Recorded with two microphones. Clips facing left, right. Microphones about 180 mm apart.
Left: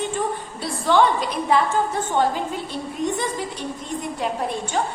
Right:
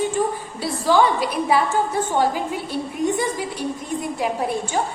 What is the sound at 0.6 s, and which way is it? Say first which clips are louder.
A woman's voice: right 1 dB; 5° right (ahead or behind).